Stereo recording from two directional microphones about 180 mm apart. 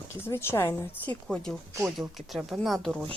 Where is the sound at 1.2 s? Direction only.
5° left (ahead or behind).